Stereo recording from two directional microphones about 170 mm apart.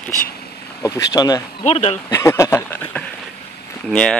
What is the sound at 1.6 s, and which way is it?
Speech, 40° left (ahead or behind).